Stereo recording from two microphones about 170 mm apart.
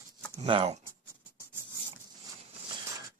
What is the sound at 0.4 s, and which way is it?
Speech, 35° right (ahead or behind).